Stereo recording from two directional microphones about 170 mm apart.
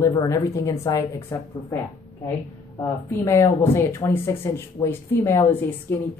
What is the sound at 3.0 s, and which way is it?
Speech, 15° left (ahead or behind).